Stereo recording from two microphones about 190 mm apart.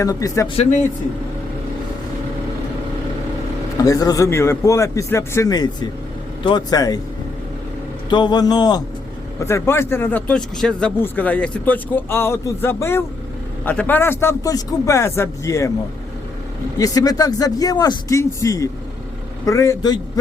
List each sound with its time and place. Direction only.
0.0 s speech: 20° left (ahead or behind)
0.5 s speech: 35° left (ahead or behind)
3.8 s a man's voice: 20° left (ahead or behind)
8.1 s a man's voice: 25° left (ahead or behind)
16.7 s a man's voice: 20° left (ahead or behind)